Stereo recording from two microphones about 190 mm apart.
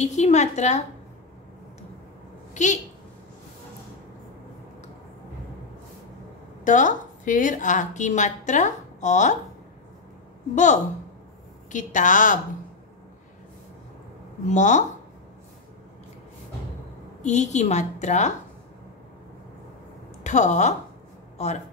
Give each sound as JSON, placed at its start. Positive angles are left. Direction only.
{"t": 0.0, "sound": "a woman's voice", "side_deg": 35}
{"t": 2.5, "sound": "a woman's voice", "side_deg": 40}
{"t": 6.6, "sound": "a woman's voice", "side_deg": 40}
{"t": 10.5, "sound": "a woman's voice", "side_deg": 40}
{"t": 14.5, "sound": "a woman's voice", "side_deg": 40}
{"t": 17.2, "sound": "a woman's voice", "side_deg": 35}
{"t": 20.2, "sound": "a woman's voice", "side_deg": 40}